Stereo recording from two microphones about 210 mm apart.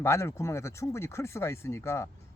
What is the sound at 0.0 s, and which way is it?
Speech, 15° left (ahead or behind).